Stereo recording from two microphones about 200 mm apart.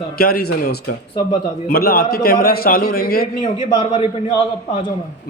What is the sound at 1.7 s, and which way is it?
A man's voice, 50° left (ahead or behind).